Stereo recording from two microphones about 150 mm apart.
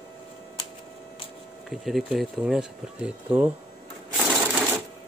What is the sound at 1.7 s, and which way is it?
Speech, centre (ahead or behind).